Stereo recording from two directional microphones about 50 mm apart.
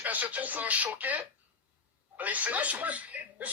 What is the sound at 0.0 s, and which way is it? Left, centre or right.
Speech, right.